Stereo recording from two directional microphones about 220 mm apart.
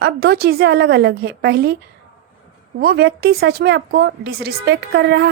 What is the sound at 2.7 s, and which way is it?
A woman's voice, 45° right (ahead or behind).